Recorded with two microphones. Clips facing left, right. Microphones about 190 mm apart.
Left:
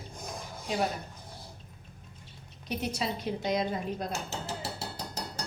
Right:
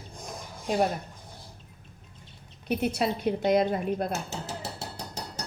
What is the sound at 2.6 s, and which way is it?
A woman's voice, 60° right (ahead or behind).